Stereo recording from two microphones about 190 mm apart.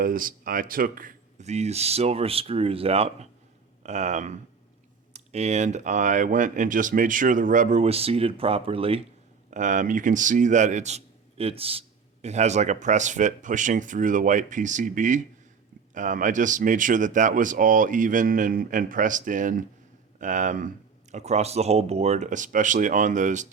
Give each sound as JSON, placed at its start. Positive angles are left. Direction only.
{"t": 0.0, "sound": "speech", "side_deg": -50}
{"t": 9.5, "sound": "speech", "side_deg": -40}